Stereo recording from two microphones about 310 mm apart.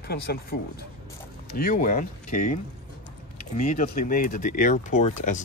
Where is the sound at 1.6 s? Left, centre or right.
Left.